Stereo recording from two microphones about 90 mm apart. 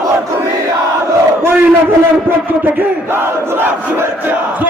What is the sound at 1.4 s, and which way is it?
Battle cry, 25° right (ahead or behind).